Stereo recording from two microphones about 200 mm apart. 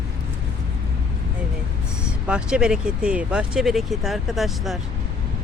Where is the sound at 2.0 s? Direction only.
5° right (ahead or behind).